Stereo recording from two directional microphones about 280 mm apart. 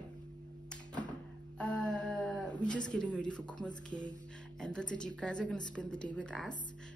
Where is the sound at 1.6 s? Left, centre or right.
Centre.